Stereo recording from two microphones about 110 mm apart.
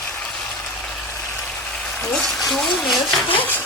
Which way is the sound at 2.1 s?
5° left (ahead or behind).